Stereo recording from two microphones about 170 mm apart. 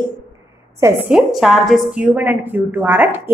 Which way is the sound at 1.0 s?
Centre (ahead or behind).